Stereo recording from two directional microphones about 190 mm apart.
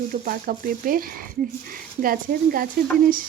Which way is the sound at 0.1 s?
50° right (ahead or behind).